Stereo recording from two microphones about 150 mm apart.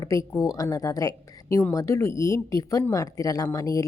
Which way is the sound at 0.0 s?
20° left (ahead or behind).